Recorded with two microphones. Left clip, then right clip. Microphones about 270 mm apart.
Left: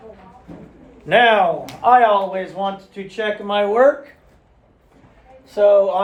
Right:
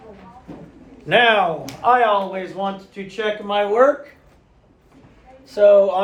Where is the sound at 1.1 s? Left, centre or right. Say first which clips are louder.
Left 2 dB; left.